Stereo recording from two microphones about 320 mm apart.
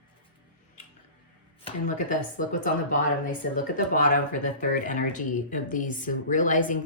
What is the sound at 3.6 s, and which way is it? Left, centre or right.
Speech, left.